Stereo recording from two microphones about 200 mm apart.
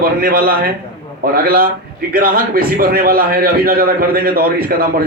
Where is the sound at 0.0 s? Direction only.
45° right (ahead or behind).